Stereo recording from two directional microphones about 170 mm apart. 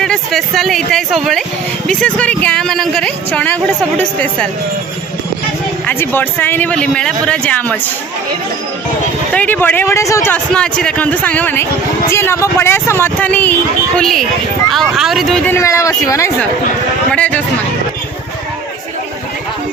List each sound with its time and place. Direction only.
0.0 s speech: centre (ahead or behind)
5.8 s speech: 10° left (ahead or behind)
9.3 s speech: 10° left (ahead or behind)
15.5 s speech: 15° left (ahead or behind)